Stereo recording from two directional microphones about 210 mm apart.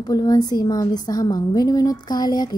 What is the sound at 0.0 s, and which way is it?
A woman's voice, 15° left (ahead or behind).